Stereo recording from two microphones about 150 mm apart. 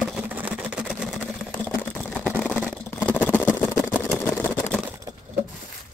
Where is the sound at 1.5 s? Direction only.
10° left (ahead or behind).